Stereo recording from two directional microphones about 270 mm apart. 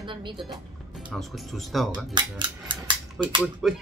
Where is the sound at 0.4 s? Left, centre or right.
Centre.